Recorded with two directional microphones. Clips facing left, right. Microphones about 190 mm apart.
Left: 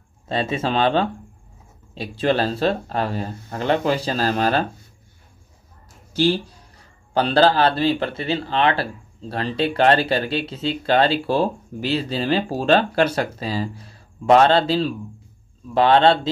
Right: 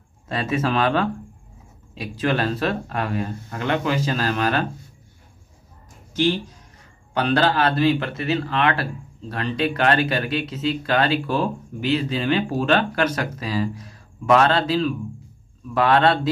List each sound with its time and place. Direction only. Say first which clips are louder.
0.3 s speech: even; 25° left (ahead or behind)
6.1 s speech: left 2 dB; 35° left (ahead or behind)